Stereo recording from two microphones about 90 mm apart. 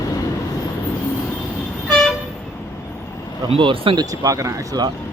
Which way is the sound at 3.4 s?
85° right.